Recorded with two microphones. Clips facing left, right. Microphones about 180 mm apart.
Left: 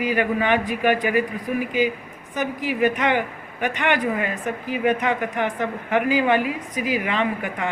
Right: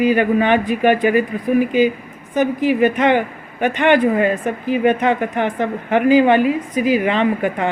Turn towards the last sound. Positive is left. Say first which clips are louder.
# right 7 dB
turn(degrees=-30)  # may be behind; listen again after turning